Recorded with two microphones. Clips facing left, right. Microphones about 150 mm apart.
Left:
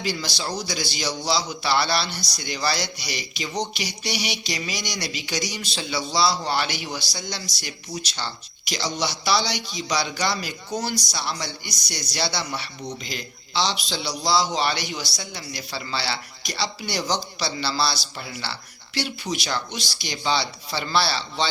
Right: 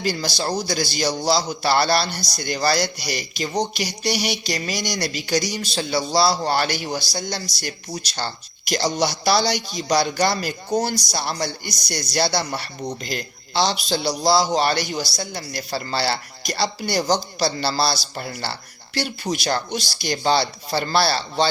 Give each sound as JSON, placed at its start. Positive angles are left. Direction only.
{"t": 0.0, "sound": "a man's voice", "side_deg": -45}
{"t": 8.7, "sound": "a man's voice", "side_deg": -45}